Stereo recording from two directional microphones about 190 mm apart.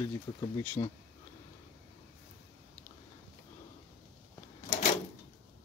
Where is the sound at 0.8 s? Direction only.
30° left (ahead or behind).